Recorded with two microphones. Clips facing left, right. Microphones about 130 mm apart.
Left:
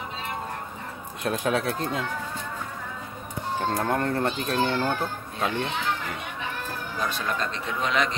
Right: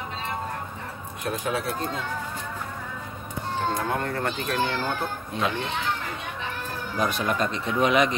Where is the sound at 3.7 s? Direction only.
30° left (ahead or behind).